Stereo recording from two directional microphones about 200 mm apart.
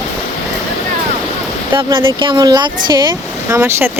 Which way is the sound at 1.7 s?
25° right (ahead or behind).